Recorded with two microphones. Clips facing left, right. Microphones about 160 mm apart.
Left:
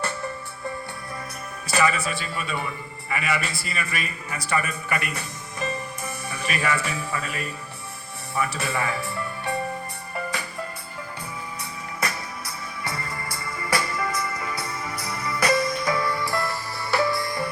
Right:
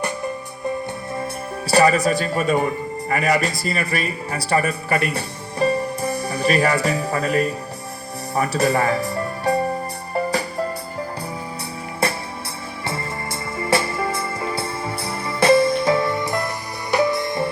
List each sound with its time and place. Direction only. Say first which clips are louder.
1.2 s a man's voice: right 9 dB; 35° right (ahead or behind)
8.4 s music: right 8 dB; 40° right (ahead or behind)
12.0 s music: right 7 dB; 30° right (ahead or behind)